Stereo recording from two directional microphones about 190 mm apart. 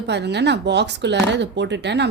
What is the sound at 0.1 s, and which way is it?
Speech, 65° right (ahead or behind).